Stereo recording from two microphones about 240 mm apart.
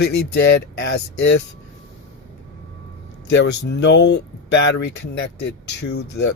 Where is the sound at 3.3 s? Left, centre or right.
Left.